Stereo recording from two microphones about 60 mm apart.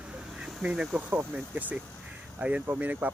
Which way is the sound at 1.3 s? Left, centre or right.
Right.